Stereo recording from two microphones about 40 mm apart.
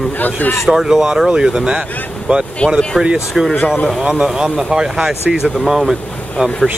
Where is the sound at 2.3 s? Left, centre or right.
Right.